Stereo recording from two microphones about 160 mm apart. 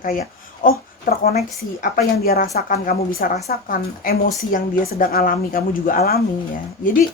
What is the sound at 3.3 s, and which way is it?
Speech, 45° left (ahead or behind).